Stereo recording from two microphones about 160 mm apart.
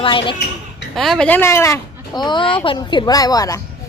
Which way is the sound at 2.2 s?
30° left (ahead or behind).